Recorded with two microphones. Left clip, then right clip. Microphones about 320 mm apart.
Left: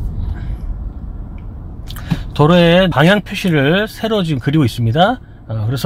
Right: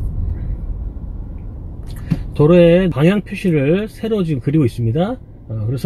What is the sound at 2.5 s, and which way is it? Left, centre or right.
Speech, left.